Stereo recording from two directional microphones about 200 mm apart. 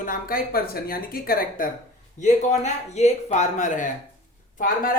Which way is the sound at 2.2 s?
35° left (ahead or behind).